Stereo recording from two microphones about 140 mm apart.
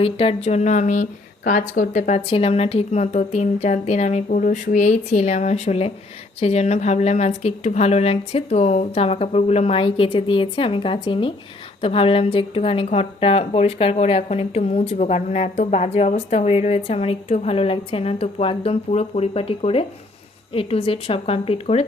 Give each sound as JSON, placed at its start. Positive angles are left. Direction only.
{"t": 0.0, "sound": "a woman's voice", "side_deg": 45}
{"t": 1.5, "sound": "a woman's voice", "side_deg": 70}